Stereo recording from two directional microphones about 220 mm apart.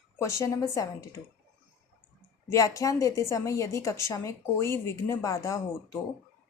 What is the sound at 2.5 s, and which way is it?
A woman's voice, 15° left (ahead or behind).